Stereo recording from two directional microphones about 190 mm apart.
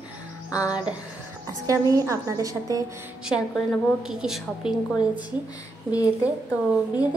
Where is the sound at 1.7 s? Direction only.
15° right (ahead or behind).